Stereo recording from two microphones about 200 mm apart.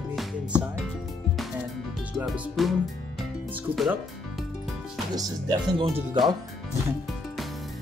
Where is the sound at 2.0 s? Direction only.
Centre (ahead or behind).